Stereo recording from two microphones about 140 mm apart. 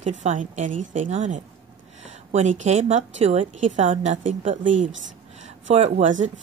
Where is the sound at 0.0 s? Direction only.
55° right (ahead or behind).